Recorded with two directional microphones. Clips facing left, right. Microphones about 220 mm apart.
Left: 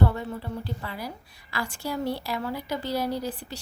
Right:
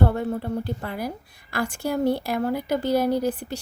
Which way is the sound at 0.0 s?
50° right (ahead or behind).